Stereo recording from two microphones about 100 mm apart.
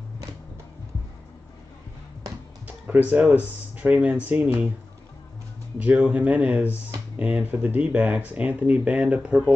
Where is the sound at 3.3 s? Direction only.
15° right (ahead or behind).